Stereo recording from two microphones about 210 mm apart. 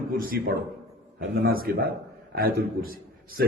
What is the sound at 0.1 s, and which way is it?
Speech, 45° right (ahead or behind).